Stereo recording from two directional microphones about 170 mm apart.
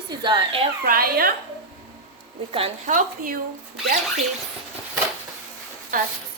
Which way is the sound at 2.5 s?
35° right (ahead or behind).